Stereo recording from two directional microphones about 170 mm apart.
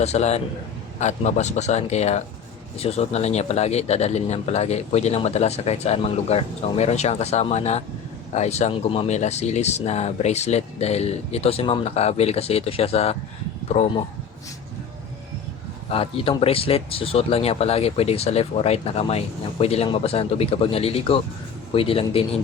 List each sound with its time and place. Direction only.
0.0 s speech: 40° left (ahead or behind)
15.9 s speech: 35° left (ahead or behind)